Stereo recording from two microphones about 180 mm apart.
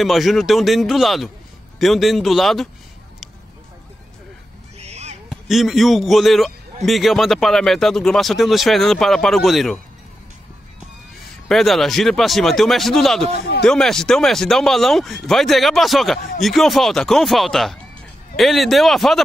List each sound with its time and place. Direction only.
0.0 s a man's voice: centre (ahead or behind)
4.8 s owl: 35° right (ahead or behind)
5.3 s a man's voice: centre (ahead or behind)
11.4 s a man's voice: centre (ahead or behind)